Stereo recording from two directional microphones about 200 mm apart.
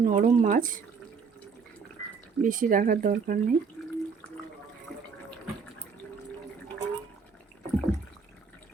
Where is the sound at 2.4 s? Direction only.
40° right (ahead or behind).